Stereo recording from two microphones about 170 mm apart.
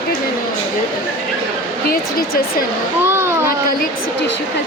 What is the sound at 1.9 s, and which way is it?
Speech, 60° left (ahead or behind).